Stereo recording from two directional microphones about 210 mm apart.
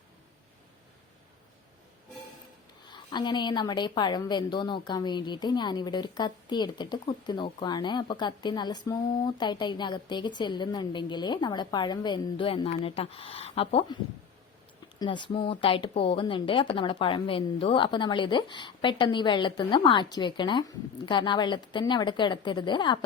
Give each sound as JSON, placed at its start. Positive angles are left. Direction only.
{"t": 2.8, "sound": "a woman's voice", "side_deg": 20}
{"t": 14.9, "sound": "a woman's voice", "side_deg": 20}